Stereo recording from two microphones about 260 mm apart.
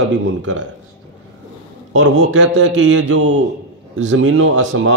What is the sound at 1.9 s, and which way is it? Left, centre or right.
A man's voice, right.